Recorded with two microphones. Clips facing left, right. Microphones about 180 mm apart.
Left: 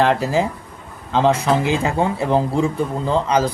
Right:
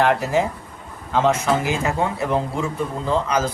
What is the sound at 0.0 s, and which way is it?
Speech, 30° left (ahead or behind).